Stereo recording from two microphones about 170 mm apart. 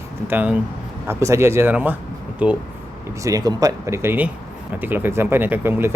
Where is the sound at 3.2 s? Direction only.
20° right (ahead or behind).